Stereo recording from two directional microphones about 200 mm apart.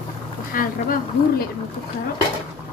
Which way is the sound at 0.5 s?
45° left (ahead or behind).